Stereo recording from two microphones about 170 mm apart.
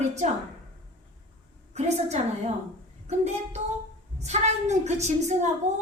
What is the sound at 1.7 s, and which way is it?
A woman's voice, 40° right (ahead or behind).